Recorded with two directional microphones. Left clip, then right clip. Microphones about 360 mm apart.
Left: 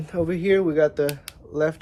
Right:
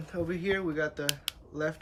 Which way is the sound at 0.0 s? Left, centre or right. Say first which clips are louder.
Left 9 dB; centre.